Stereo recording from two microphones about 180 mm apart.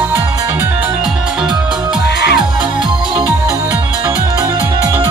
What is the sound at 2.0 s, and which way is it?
Music, 70° left (ahead or behind).